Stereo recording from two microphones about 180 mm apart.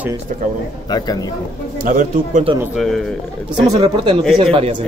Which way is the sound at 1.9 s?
50° right (ahead or behind).